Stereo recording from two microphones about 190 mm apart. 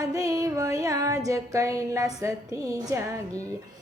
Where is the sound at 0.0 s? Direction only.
15° right (ahead or behind).